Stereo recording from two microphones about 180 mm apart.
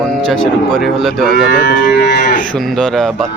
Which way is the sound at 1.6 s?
65° left (ahead or behind).